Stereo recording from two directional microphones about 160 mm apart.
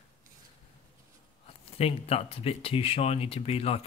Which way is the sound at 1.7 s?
40° left (ahead or behind).